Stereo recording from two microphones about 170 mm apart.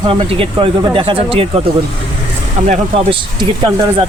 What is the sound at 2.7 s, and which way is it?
Speech, 30° right (ahead or behind).